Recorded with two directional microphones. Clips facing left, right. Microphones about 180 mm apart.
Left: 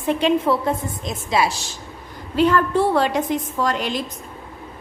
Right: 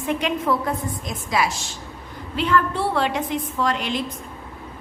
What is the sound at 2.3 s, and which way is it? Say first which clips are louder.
A woman's voice: left 5 dB; 40° left (ahead or behind).